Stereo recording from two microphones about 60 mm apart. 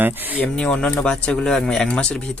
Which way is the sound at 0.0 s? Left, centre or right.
Right.